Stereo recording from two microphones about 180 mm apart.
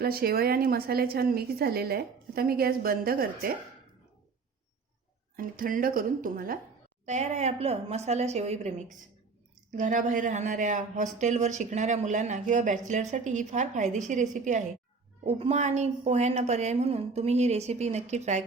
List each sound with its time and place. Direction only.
0.0 s a woman's voice: 60° right (ahead or behind)
5.4 s speech: 50° right (ahead or behind)
7.0 s a woman's voice: 40° right (ahead or behind)